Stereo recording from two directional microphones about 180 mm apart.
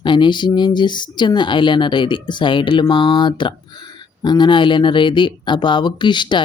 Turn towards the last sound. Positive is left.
turn(degrees=25)  # may be behind; listen again after turning